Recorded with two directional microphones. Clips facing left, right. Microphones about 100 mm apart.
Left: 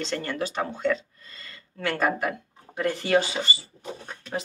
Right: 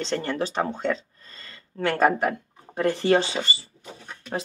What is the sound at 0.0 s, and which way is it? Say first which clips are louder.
Speech: right 3 dB; 30° right (ahead or behind).